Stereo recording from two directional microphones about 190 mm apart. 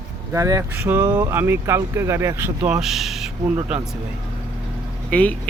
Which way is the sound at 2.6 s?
5° right (ahead or behind).